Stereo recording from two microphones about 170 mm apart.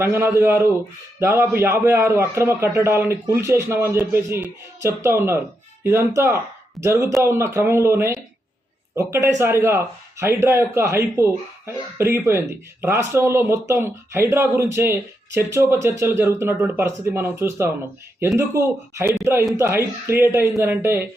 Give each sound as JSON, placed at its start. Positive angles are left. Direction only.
{"t": 0.0, "sound": "speech", "side_deg": -15}